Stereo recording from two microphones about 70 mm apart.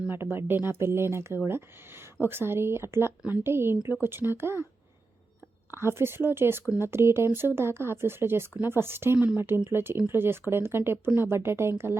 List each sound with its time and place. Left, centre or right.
0.1 s speech: right
5.8 s speech: right
9.1 s speech: centre
9.6 s speech: right